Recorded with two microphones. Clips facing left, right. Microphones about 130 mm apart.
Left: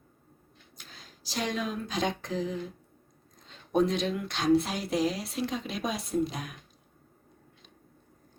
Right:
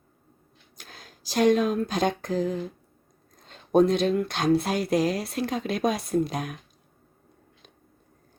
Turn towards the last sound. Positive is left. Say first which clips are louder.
# right 4 dB
turn(degrees=-50)  # may be behind; listen again after turning